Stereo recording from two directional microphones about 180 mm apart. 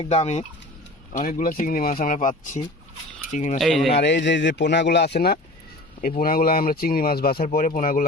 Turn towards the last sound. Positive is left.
turn(degrees=45)  # may be behind; listen again after turning